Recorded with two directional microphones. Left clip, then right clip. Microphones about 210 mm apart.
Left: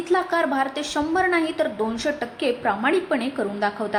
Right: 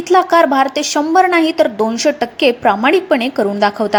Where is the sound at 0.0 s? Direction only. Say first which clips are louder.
Right 11 dB; 30° right (ahead or behind).